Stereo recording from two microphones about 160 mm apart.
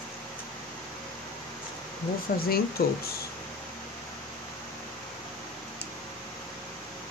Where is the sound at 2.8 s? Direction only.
75° left (ahead or behind).